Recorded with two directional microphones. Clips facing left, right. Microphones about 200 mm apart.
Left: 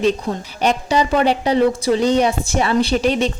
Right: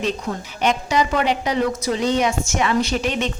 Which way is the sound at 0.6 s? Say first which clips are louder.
Left 2 dB; 35° left (ahead or behind).